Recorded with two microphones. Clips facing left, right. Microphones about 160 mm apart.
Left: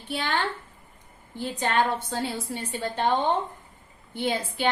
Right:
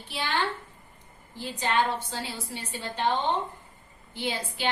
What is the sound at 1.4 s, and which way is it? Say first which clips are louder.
A woman's voice: left 2 dB; 50° left (ahead or behind).